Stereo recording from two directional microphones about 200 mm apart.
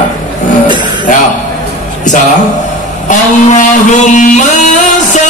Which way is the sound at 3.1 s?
40° left (ahead or behind).